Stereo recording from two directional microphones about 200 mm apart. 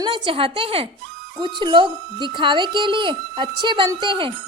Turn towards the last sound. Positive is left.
turn(degrees=-25)  # may be behind; listen again after turning